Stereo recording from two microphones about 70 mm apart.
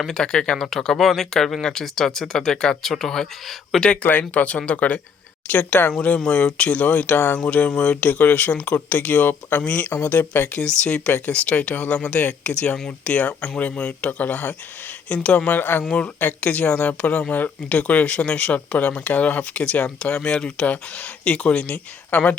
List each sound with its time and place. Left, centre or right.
0.0 s speech: centre
3.8 s speech: left
10.6 s speech: centre
15.9 s speech: centre